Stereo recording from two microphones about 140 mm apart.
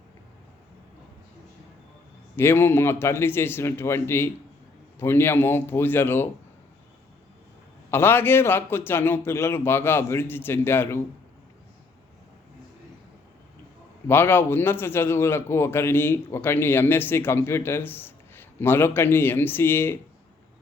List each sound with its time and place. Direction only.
2.3 s a man's voice: 15° left (ahead or behind)
7.9 s a man's voice: 15° left (ahead or behind)
14.1 s a man's voice: 15° left (ahead or behind)